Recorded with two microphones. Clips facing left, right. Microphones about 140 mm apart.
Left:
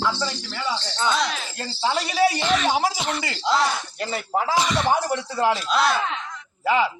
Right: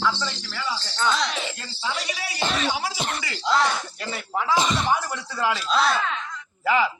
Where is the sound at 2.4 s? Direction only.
35° right (ahead or behind).